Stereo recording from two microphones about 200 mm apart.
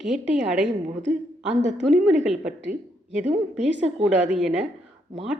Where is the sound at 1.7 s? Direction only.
Centre (ahead or behind).